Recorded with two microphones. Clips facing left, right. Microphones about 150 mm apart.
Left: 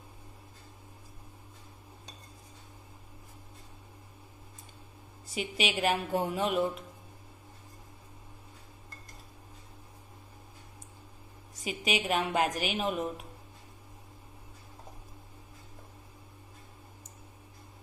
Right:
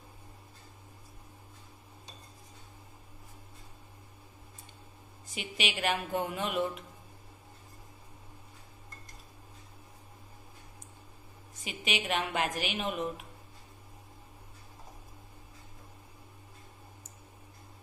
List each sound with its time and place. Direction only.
5.3 s a woman's voice: 40° left (ahead or behind)
11.6 s a woman's voice: 40° left (ahead or behind)